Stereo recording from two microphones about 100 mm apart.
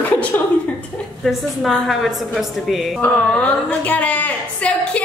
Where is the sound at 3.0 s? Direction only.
15° left (ahead or behind).